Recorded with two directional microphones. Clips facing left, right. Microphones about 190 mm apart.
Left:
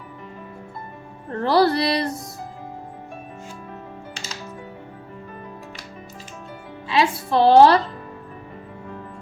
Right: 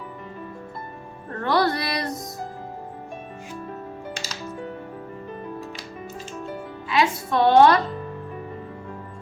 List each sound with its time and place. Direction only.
1.4 s music: 30° left (ahead or behind)
6.8 s a woman's voice: 30° left (ahead or behind)